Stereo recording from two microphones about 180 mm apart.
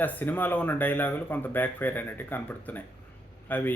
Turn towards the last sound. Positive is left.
turn(degrees=10)  # may be behind; listen again after turning